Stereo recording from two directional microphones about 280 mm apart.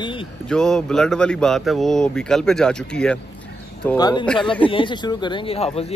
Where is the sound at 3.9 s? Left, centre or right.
Centre.